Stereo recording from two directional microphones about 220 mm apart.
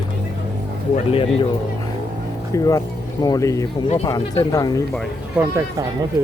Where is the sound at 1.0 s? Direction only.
25° left (ahead or behind).